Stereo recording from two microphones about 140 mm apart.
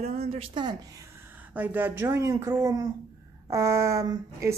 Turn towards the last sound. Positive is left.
turn(degrees=-25)  # may be behind; listen again after turning